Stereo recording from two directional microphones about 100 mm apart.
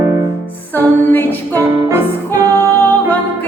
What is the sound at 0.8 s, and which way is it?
Music, 20° left (ahead or behind).